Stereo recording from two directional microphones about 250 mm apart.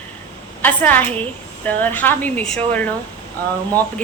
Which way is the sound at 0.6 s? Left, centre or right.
Centre.